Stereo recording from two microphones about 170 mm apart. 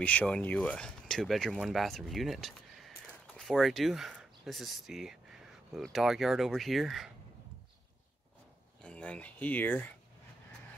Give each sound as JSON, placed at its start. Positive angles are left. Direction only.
{"t": 0.0, "sound": "speech", "side_deg": 10}
{"t": 8.8, "sound": "speech", "side_deg": 5}